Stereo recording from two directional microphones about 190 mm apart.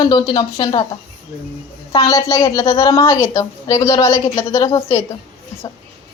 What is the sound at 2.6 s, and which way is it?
Speech, 30° left (ahead or behind).